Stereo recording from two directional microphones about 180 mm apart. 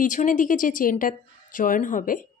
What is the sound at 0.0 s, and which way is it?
A woman's voice, 45° left (ahead or behind).